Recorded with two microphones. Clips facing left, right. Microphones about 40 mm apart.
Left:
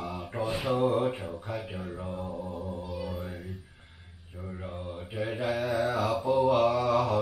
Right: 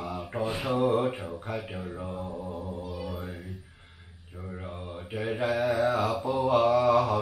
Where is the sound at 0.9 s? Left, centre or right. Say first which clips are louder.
Right 1 dB; centre.